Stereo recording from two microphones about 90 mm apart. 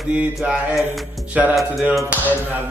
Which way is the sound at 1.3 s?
15° right (ahead or behind).